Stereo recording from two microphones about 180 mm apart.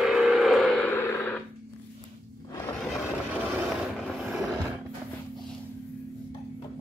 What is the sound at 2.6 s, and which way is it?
Music, 5° left (ahead or behind).